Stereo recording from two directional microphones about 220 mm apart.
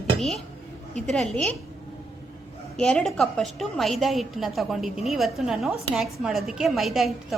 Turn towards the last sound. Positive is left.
turn(degrees=0)  # may be behind; listen again after turning